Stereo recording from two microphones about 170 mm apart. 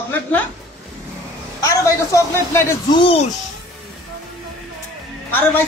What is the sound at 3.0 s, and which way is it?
Speech, 30° left (ahead or behind).